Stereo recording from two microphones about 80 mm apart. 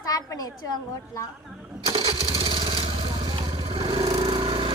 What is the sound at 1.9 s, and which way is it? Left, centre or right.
Lawn mower, right.